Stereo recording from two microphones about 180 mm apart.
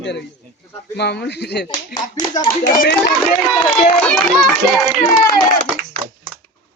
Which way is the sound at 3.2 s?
Centre (ahead or behind).